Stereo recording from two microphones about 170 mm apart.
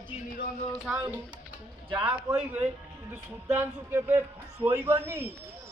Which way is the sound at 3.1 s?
10° right (ahead or behind).